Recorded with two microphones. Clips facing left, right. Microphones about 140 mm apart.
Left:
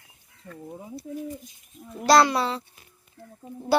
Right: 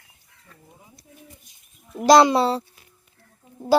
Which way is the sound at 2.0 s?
20° right (ahead or behind).